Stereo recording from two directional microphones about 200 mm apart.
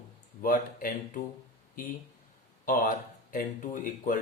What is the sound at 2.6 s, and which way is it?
Speech, 45° left (ahead or behind).